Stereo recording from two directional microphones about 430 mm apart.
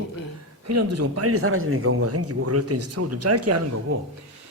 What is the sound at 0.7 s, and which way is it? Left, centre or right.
Speech, right.